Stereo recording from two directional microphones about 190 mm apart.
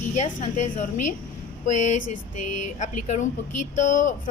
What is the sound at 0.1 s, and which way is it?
A woman's voice, 40° left (ahead or behind).